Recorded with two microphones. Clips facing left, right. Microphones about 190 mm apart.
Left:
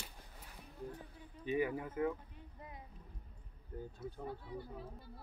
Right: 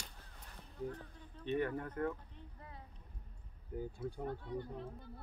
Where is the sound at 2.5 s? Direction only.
15° left (ahead or behind).